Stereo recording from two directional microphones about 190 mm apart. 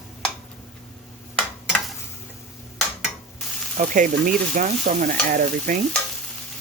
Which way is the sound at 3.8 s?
40° right (ahead or behind).